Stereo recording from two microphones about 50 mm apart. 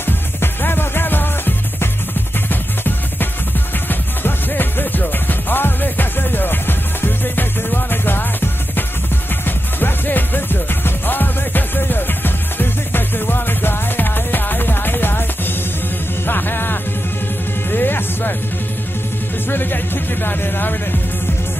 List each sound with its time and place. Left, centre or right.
0.0 s music: left
19.5 s music: left